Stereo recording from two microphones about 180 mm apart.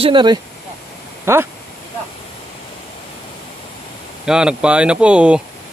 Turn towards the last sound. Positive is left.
turn(degrees=-5)  # may be behind; listen again after turning